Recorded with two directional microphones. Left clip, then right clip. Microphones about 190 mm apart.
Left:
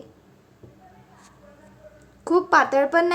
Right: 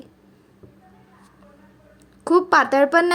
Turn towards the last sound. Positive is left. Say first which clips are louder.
# right 3 dB
turn(degrees=-25)  # may be behind; listen again after turning